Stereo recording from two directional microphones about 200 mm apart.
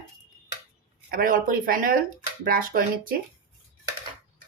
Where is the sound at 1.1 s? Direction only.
45° right (ahead or behind).